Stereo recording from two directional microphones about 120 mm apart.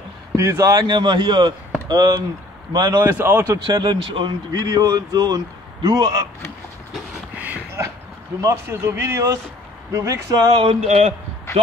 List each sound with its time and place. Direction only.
0.4 s a man's voice: 25° right (ahead or behind)
3.0 s speech: 20° right (ahead or behind)
3.4 s a man's voice: 35° right (ahead or behind)
7.3 s a sound: 15° right (ahead or behind)
8.4 s speech: 25° right (ahead or behind)
10.5 s speech: 50° right (ahead or behind)